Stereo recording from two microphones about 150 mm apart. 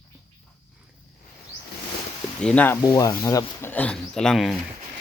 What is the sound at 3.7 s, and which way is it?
Speech, 10° left (ahead or behind).